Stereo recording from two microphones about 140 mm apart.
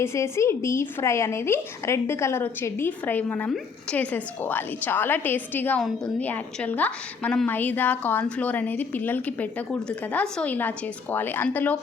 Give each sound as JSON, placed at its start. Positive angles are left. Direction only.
{"t": 0.0, "sound": "a woman's voice", "side_deg": 20}